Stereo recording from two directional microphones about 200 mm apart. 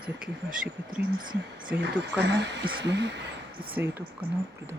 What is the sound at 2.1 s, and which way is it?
Speech, 55° right (ahead or behind).